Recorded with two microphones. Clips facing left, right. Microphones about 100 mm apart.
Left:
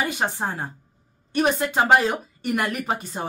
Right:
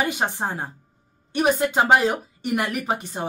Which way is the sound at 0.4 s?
20° right (ahead or behind).